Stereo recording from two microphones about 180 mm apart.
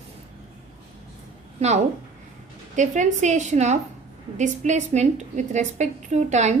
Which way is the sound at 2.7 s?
45° right (ahead or behind).